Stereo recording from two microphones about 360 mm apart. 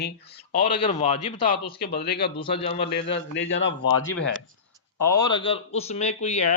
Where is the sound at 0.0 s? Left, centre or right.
Left.